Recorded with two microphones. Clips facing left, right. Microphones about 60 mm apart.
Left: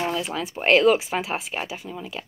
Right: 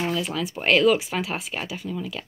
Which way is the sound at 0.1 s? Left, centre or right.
Left.